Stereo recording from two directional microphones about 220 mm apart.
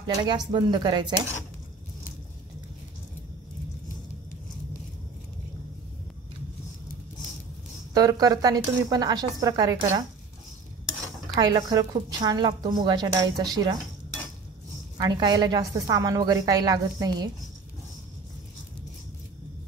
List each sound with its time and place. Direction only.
0.0 s speech: 20° right (ahead or behind)
7.9 s a woman's voice: 15° right (ahead or behind)
11.3 s a woman's voice: 15° right (ahead or behind)
15.0 s a woman's voice: 20° right (ahead or behind)